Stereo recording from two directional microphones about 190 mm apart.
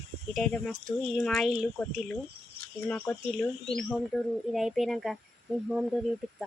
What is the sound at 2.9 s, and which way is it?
Speech, 10° left (ahead or behind).